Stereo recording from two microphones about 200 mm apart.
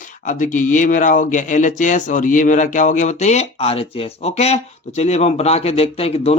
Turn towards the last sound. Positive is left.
turn(degrees=30)  # may be behind; listen again after turning